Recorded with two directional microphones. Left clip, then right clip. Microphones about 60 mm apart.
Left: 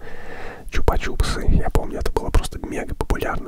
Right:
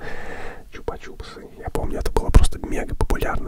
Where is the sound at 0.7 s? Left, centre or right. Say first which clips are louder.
Left 10 dB; left.